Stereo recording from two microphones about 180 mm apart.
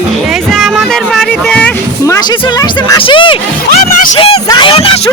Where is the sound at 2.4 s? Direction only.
25° left (ahead or behind).